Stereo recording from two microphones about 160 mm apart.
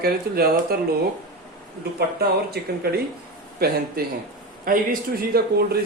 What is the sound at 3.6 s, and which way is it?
Speech, 70° right (ahead or behind).